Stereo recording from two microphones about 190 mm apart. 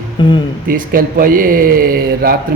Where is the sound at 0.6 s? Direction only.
50° right (ahead or behind).